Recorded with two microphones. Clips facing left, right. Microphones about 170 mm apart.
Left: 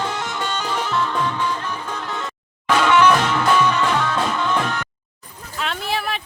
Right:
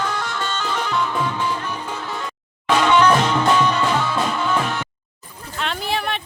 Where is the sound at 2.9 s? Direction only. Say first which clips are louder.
Even; 25° right (ahead or behind); by 4.6 s 5° right (ahead or behind).